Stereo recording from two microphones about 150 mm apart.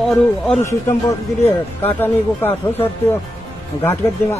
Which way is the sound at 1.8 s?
15° left (ahead or behind).